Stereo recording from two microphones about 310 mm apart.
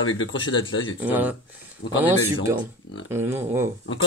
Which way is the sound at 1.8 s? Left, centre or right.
Left.